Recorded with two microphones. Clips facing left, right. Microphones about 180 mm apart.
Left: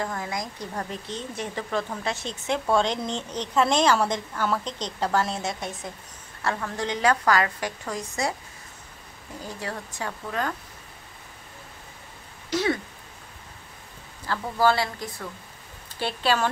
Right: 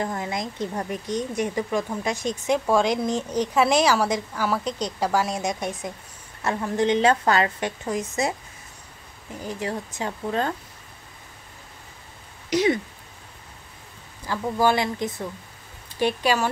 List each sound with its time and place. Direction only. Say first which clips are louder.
0.0 s a woman's voice: right 3 dB; 20° right (ahead or behind)
9.4 s a woman's voice: right 5 dB; 20° right (ahead or behind)
12.4 s speech: right 4 dB; 20° right (ahead or behind)
14.2 s speech: right 1 dB; 15° right (ahead or behind)